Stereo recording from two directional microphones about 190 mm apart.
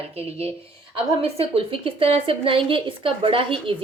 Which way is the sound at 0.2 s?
30° right (ahead or behind).